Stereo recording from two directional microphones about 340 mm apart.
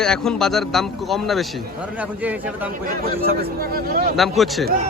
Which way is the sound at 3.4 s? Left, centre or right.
Right.